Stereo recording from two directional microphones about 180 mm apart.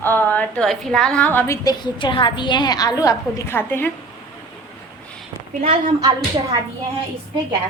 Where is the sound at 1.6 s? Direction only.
25° left (ahead or behind).